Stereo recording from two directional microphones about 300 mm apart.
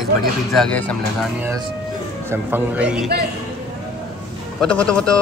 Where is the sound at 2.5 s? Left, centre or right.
Centre.